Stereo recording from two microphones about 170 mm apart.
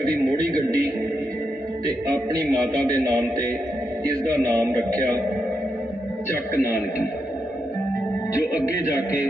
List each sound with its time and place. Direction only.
2.0 s a man's voice: 20° right (ahead or behind)
4.5 s a man's voice: 20° right (ahead or behind)
6.3 s a man's voice: 15° left (ahead or behind)